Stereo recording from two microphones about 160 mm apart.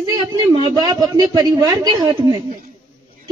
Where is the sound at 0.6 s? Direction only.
25° right (ahead or behind).